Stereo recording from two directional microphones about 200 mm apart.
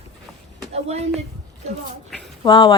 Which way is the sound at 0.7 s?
30° right (ahead or behind).